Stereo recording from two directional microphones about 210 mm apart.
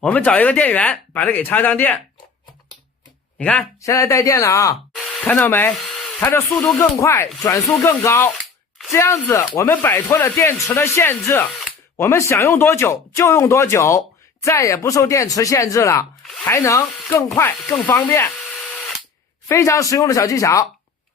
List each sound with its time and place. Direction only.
0.0 s speech: 5° left (ahead or behind)
3.3 s speech: 5° left (ahead or behind)
19.5 s speech: 15° left (ahead or behind)